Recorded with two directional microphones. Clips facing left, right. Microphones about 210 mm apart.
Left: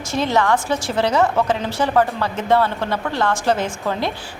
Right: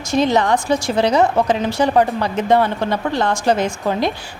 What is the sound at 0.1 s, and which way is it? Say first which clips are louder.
A woman's voice: right 3 dB; 15° right (ahead or behind).